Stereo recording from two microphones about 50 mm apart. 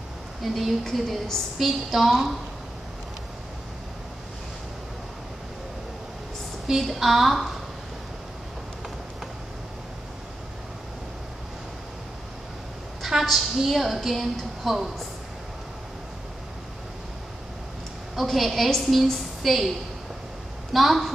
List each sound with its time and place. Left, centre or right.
0.4 s a woman's voice: centre
6.7 s a woman's voice: centre
13.0 s a woman's voice: centre
18.1 s a woman's voice: centre
20.7 s a woman's voice: centre